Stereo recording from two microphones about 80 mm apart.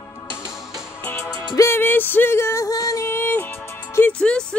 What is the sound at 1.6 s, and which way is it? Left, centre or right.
Music, left.